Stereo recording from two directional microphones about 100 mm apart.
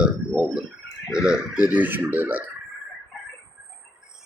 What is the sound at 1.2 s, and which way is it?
Speech, 10° right (ahead or behind).